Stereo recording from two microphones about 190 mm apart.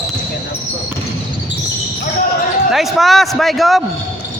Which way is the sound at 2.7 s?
Centre (ahead or behind).